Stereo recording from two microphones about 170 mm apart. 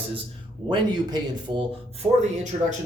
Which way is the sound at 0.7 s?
30° right (ahead or behind).